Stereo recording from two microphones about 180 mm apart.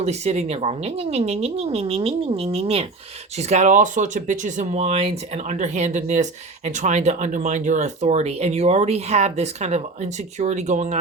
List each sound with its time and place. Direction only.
0.0 s speech: 35° right (ahead or behind)